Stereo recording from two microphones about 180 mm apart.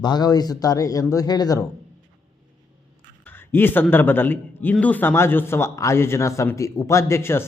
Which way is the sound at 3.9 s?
10° left (ahead or behind).